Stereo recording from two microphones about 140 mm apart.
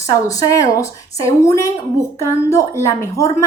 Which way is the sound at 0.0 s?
25° left (ahead or behind).